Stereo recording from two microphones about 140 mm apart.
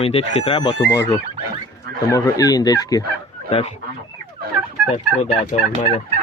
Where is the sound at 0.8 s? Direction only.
25° left (ahead or behind).